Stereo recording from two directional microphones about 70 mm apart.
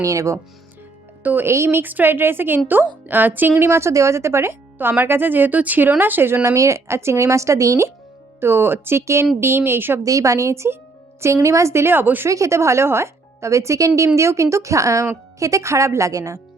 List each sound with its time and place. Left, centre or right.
0.0 s speech: right
1.2 s speech: right
1.5 s speech: right
3.7 s speech: right
8.4 s speech: right
10.0 s speech: right
12.3 s speech: right